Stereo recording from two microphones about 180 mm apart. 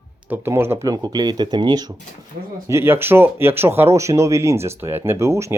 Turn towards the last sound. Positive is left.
turn(degrees=-15)  # may be behind; listen again after turning